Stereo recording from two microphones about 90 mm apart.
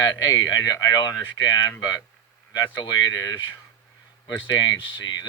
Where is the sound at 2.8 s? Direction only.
45° left (ahead or behind).